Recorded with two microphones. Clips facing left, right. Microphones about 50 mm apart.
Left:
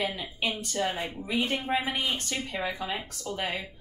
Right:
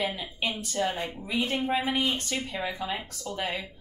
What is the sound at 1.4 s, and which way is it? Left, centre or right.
Speech, left.